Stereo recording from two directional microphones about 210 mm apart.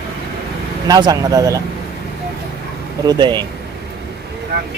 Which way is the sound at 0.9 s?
20° right (ahead or behind).